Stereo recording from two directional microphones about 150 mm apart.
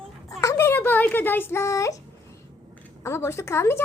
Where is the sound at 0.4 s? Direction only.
15° left (ahead or behind).